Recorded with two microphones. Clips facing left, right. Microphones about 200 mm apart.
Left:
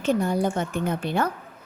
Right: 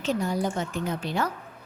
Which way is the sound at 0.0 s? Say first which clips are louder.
Left 4 dB; 55° left (ahead or behind).